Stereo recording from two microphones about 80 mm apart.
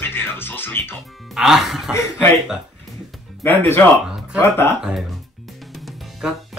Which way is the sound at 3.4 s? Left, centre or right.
Left.